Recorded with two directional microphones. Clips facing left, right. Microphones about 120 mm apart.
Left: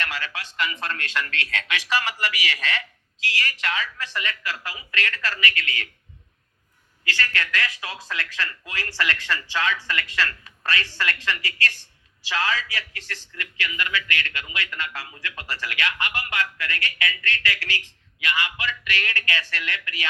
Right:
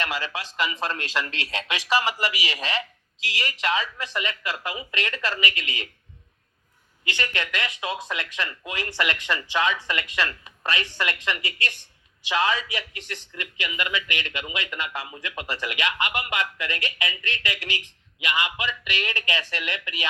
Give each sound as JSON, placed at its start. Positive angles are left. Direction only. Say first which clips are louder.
{"t": 0.0, "sound": "a man's voice", "louder": "right 2 dB", "side_deg": -20}
{"t": 7.0, "sound": "a man's voice", "louder": "left 1 dB", "side_deg": -20}